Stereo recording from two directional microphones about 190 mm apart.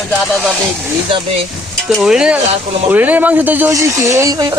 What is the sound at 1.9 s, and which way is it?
A man's voice, 5° right (ahead or behind).